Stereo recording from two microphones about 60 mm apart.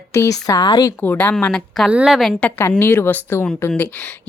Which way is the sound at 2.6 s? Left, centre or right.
Left.